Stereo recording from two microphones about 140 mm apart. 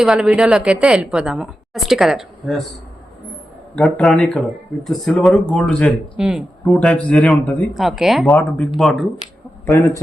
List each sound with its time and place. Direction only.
0.0 s a woman's voice: 5° right (ahead or behind)
3.8 s a woman's voice: 5° left (ahead or behind)
6.1 s a woman's voice: 5° right (ahead or behind)
6.7 s speech: 10° left (ahead or behind)
8.4 s a woman's voice: 10° left (ahead or behind)
9.6 s speech: 20° left (ahead or behind)